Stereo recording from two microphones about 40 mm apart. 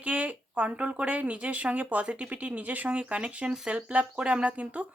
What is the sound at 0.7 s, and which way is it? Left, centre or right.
A woman's voice, right.